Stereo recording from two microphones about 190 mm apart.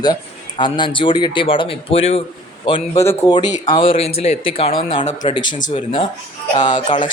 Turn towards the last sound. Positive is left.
turn(degrees=25)  # may be behind; listen again after turning